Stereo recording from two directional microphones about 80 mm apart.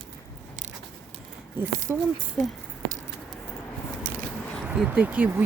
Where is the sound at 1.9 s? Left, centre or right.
Centre.